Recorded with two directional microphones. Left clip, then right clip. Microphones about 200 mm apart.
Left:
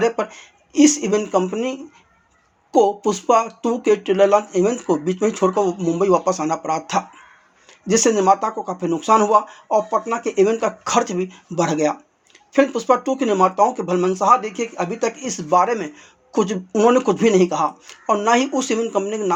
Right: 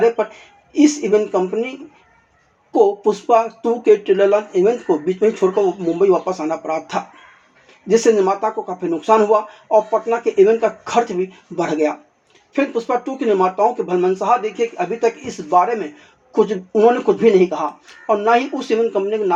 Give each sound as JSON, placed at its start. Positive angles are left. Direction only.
{"t": 0.0, "sound": "speech", "side_deg": 25}